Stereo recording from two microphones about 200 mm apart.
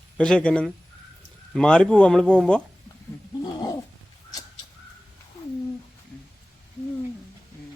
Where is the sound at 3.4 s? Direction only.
20° left (ahead or behind).